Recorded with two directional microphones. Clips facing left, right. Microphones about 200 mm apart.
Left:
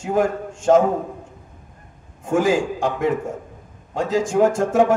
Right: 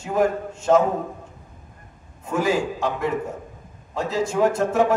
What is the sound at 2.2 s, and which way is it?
Speech, 90° left.